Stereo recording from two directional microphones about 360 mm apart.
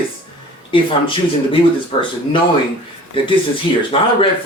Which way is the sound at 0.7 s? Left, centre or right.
Centre.